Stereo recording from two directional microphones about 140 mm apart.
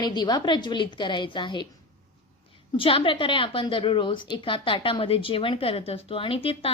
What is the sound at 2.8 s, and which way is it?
A woman's voice, 40° left (ahead or behind).